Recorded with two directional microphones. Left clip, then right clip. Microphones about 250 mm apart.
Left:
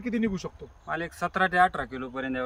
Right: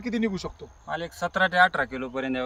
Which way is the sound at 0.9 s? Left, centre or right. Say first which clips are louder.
Right 1 dB; centre.